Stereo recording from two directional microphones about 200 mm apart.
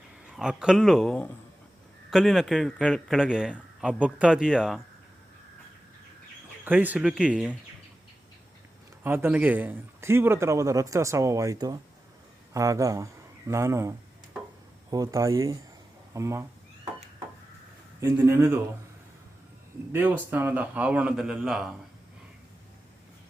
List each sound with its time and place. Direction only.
0.3 s a man's voice: 5° right (ahead or behind)
6.7 s a man's voice: 10° right (ahead or behind)
9.0 s a man's voice: 10° right (ahead or behind)
18.0 s a man's voice: 10° right (ahead or behind)
19.9 s a man's voice: 10° right (ahead or behind)